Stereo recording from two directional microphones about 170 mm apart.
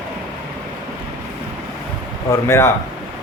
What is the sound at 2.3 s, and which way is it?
Speech, 15° left (ahead or behind).